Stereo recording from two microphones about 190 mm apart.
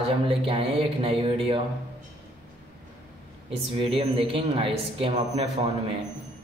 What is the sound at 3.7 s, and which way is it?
Speech, 30° right (ahead or behind).